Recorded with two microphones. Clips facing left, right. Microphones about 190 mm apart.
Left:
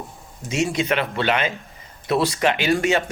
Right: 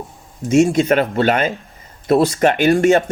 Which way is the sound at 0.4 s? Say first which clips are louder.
Right 9 dB; 50° right (ahead or behind).